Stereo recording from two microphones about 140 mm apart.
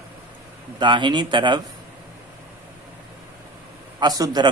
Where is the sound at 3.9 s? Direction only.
30° right (ahead or behind).